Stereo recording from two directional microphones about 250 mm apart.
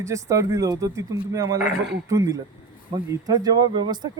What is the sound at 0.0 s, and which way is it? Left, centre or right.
Speech, centre.